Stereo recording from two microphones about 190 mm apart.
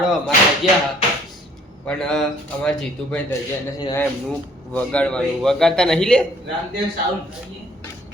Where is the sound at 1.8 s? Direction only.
5° left (ahead or behind).